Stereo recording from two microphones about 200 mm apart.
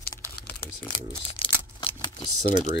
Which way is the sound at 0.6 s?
10° left (ahead or behind).